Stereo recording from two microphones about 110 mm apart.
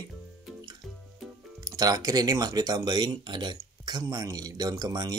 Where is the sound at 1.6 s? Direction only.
35° right (ahead or behind).